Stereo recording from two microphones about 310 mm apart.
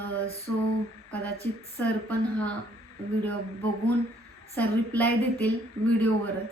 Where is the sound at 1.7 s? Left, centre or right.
Centre.